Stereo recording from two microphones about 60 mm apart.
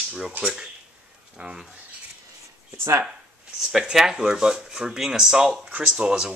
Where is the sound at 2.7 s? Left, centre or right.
Right.